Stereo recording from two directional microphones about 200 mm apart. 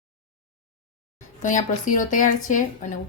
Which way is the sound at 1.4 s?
40° left (ahead or behind).